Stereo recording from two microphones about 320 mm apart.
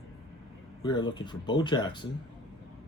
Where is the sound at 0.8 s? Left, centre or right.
Centre.